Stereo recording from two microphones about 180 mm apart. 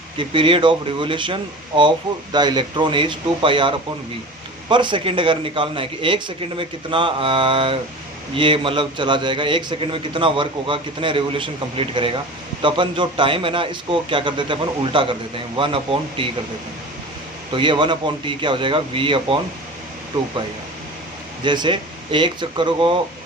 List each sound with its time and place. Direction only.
0.2 s a man's voice: 30° right (ahead or behind)
17.5 s a man's voice: 25° right (ahead or behind)
21.4 s a man's voice: 25° right (ahead or behind)